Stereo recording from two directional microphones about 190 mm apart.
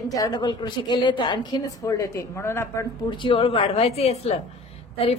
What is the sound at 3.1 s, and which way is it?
A woman's voice, 25° left (ahead or behind).